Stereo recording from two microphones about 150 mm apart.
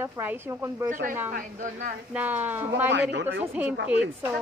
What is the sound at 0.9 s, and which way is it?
A woman's voice, 60° right (ahead or behind).